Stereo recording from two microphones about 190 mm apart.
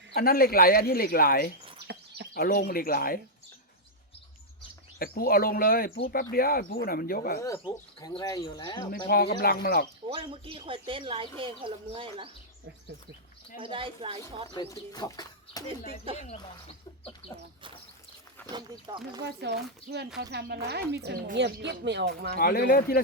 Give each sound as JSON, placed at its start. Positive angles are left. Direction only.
{"t": 0.1, "sound": "speech", "side_deg": 50}
{"t": 4.9, "sound": "speech", "side_deg": 50}
{"t": 7.4, "sound": "speech", "side_deg": 15}
{"t": 9.0, "sound": "speech", "side_deg": 55}
{"t": 10.1, "sound": "speech", "side_deg": -30}
{"t": 13.6, "sound": "speech", "side_deg": -25}
{"t": 14.5, "sound": "speech", "side_deg": 20}
{"t": 16.1, "sound": "speech", "side_deg": 30}
{"t": 18.4, "sound": "a sound", "side_deg": 10}
{"t": 19.2, "sound": "speech", "side_deg": -60}
{"t": 22.4, "sound": "speech", "side_deg": 50}